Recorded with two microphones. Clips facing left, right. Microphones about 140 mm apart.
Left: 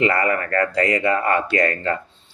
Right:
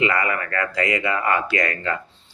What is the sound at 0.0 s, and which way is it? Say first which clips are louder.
Speech: left 3 dB; 40° left (ahead or behind).